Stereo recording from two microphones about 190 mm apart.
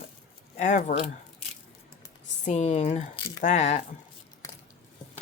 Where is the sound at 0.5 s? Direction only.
40° left (ahead or behind).